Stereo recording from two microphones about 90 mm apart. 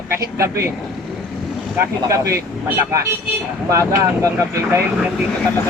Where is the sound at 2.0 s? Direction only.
35° right (ahead or behind).